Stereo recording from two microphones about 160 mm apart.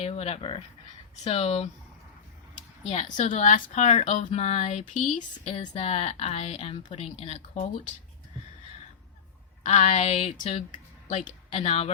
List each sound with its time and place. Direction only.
0.0 s speech: 40° left (ahead or behind)
9.6 s speech: 45° left (ahead or behind)